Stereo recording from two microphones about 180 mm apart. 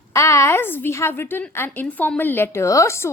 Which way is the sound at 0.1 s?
15° left (ahead or behind).